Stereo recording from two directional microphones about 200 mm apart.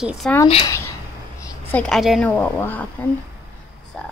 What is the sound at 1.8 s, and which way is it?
A woman's voice, centre (ahead or behind).